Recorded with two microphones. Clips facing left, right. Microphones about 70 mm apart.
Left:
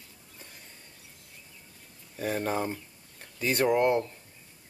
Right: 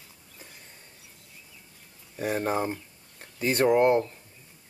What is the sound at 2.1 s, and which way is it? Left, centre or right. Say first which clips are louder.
Speech: right 2 dB; centre.